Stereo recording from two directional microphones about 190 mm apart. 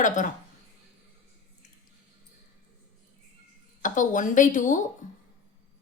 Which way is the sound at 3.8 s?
40° left (ahead or behind).